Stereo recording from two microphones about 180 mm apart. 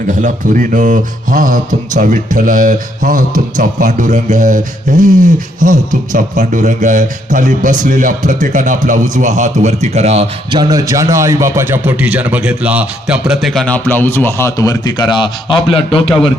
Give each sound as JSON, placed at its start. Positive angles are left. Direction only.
{"t": 0.1, "sound": "a man's voice", "side_deg": -45}